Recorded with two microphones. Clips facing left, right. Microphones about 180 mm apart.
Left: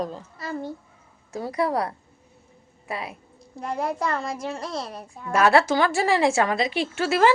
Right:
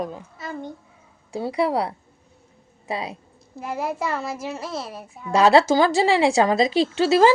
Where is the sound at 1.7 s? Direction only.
10° right (ahead or behind).